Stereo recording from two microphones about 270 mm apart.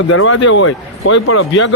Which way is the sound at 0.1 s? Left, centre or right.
Left.